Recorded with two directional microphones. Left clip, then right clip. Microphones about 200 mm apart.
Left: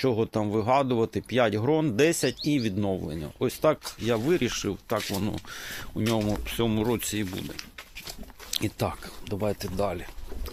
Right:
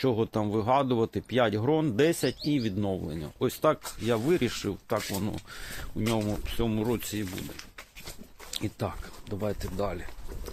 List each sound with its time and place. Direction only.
0.0 s speech: 10° left (ahead or behind); by 7.3 s 35° left (ahead or behind)
8.4 s speech: 35° left (ahead or behind)